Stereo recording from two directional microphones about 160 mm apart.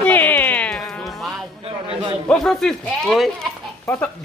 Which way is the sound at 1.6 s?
35° right (ahead or behind).